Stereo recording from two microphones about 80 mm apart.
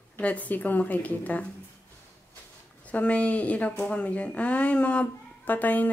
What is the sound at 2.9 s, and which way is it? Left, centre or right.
A woman's voice, centre.